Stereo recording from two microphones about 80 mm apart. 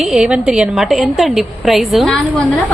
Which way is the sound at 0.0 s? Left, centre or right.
Centre.